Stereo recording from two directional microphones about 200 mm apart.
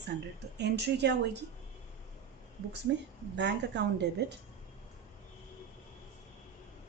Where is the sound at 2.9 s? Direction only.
60° right (ahead or behind).